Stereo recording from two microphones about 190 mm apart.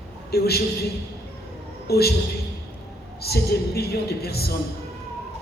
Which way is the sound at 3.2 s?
55° left (ahead or behind).